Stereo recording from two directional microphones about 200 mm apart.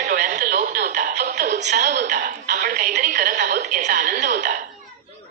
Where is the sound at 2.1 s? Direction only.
40° right (ahead or behind).